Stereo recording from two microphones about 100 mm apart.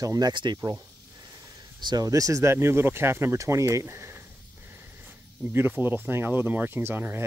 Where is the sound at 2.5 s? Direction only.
25° right (ahead or behind).